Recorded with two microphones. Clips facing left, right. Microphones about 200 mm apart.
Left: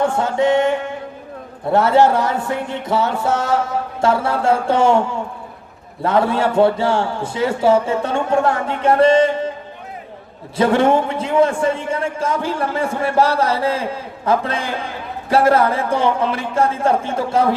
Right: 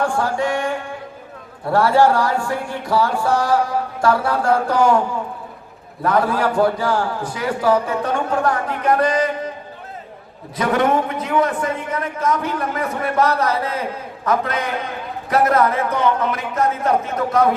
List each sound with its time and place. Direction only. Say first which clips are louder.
0.0 s a man's voice: left 3 dB; 20° left (ahead or behind)
10.6 s a man's voice: left 3 dB; 30° left (ahead or behind)